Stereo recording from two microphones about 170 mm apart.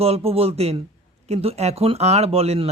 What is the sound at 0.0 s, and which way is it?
Speech, 35° right (ahead or behind).